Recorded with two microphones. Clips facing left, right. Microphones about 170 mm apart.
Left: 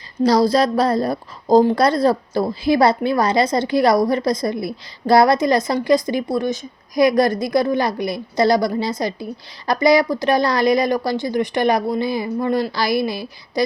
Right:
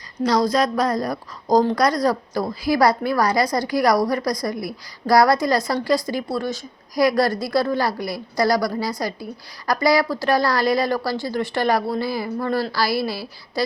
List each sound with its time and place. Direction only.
0.2 s a woman's voice: 30° left (ahead or behind)